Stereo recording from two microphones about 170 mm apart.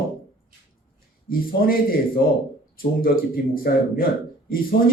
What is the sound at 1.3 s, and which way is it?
Speech, 60° left (ahead or behind).